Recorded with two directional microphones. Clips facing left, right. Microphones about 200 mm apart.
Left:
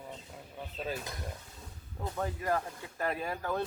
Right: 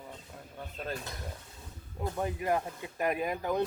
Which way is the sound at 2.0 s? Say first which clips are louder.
Right 2 dB; 15° right (ahead or behind).